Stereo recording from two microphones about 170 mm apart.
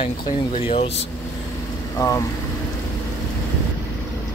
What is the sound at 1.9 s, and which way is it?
Speech, 20° left (ahead or behind).